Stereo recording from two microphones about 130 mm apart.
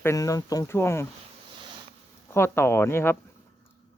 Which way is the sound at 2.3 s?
20° left (ahead or behind).